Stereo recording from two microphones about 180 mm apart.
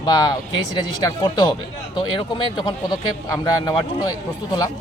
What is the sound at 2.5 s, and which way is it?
Speech, 25° left (ahead or behind).